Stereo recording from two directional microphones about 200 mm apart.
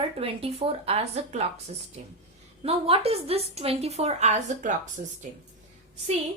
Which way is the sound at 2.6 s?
30° right (ahead or behind).